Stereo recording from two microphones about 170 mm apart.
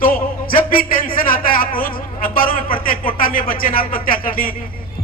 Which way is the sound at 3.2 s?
55° left (ahead or behind).